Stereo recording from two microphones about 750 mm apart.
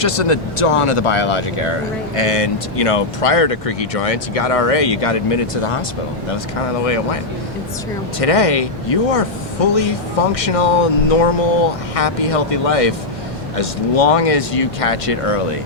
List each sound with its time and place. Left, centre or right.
0.0 s speech: left
6.8 s speech: left
8.2 s speech: left